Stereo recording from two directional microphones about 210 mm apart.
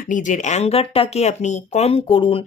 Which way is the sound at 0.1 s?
35° left (ahead or behind).